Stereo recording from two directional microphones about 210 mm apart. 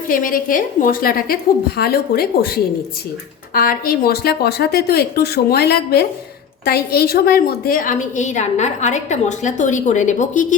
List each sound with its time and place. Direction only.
0.1 s a woman's voice: 40° left (ahead or behind)